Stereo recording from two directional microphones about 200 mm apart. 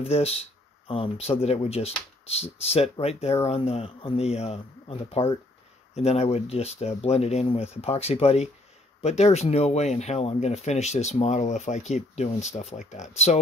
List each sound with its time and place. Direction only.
0.0 s speech: 30° left (ahead or behind)